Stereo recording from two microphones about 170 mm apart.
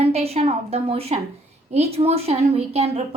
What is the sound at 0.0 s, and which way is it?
A woman's voice, 35° right (ahead or behind).